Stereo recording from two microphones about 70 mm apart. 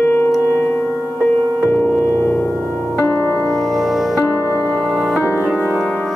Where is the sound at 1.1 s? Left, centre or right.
Centre.